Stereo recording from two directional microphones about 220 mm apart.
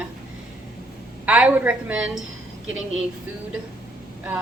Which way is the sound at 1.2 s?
5° right (ahead or behind).